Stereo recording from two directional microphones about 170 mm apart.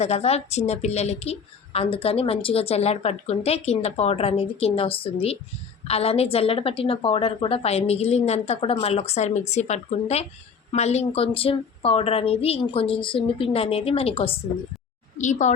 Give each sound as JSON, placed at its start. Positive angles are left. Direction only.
{"t": 0.0, "sound": "a woman's voice", "side_deg": 40}